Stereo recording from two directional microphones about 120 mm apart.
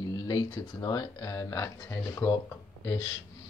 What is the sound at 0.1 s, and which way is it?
Speech, 30° left (ahead or behind).